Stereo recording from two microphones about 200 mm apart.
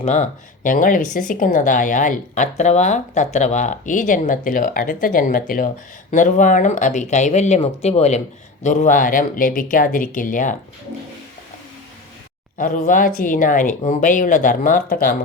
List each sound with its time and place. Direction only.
0.0 s speech: 35° left (ahead or behind)
12.5 s speech: 45° left (ahead or behind)